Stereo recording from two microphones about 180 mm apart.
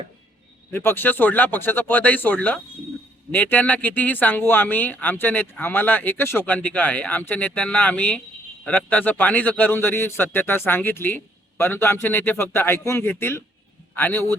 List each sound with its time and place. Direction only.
0.7 s speech: 10° left (ahead or behind)